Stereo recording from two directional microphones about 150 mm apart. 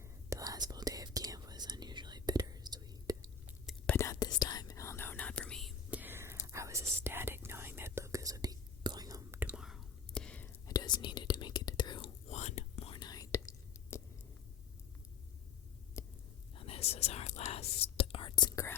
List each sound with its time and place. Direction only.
0.0 s whispering: 20° right (ahead or behind)
3.8 s whispering: 20° left (ahead or behind)
5.9 s whispering: 15° right (ahead or behind); by 10.6 s 10° left (ahead or behind)
10.7 s whispering: 25° left (ahead or behind)
12.3 s whispering: 50° left (ahead or behind); by 13.5 s 20° left (ahead or behind)
16.0 s a sound: 20° left (ahead or behind)
16.6 s whispering: 40° left (ahead or behind)